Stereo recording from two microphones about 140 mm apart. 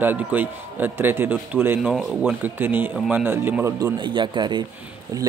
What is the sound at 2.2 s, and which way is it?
A man's voice, 15° right (ahead or behind).